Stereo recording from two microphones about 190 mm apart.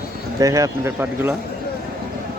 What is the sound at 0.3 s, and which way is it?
Speech, 15° right (ahead or behind).